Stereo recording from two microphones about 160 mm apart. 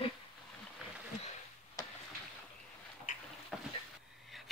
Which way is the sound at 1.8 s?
20° left (ahead or behind).